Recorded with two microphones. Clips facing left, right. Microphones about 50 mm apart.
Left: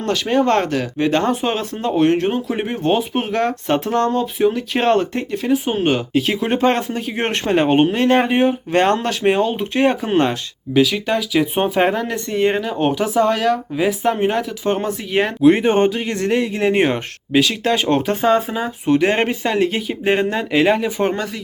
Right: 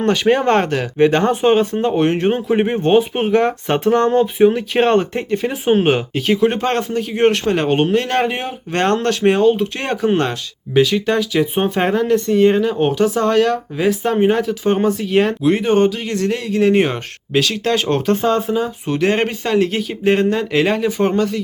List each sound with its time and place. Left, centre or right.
0.1 s speech: centre
0.9 s speech: right
1.2 s speech: centre
12.3 s speech: centre
12.5 s speech: centre
15.4 s speech: left